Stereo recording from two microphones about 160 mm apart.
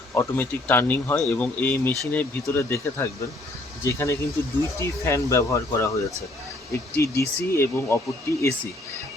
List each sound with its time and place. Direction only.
0.1 s speech: 15° left (ahead or behind)
6.9 s speech: 20° left (ahead or behind)